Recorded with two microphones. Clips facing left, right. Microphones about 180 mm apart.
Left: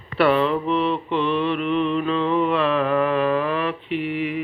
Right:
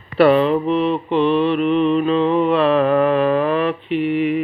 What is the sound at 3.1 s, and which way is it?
Mantra, 50° right (ahead or behind).